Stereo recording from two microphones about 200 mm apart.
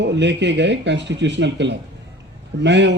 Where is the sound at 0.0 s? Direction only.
60° right (ahead or behind).